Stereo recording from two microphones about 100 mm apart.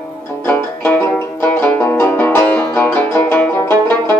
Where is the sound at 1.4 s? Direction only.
15° left (ahead or behind).